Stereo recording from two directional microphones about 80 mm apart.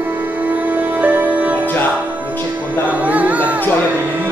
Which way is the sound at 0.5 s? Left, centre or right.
Right.